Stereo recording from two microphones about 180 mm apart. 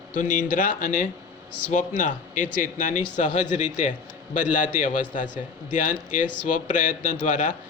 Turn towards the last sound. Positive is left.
turn(degrees=45)  # may be behind; listen again after turning